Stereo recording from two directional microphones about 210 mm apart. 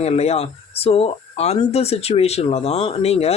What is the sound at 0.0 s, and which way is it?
Speech, 30° left (ahead or behind).